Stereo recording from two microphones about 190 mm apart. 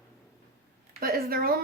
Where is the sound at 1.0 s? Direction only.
50° right (ahead or behind).